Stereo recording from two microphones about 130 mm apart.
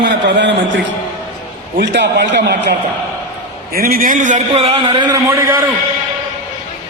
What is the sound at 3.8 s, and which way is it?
A man's voice, 90° right.